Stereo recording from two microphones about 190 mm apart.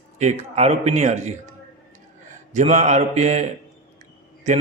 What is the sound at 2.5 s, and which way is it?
Speech, 40° right (ahead or behind).